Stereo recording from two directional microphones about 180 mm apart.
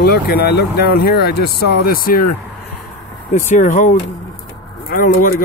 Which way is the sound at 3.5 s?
45° left (ahead or behind).